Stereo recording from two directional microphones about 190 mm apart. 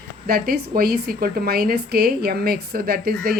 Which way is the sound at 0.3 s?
55° right (ahead or behind).